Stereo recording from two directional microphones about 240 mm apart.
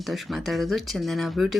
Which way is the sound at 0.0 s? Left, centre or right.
Centre.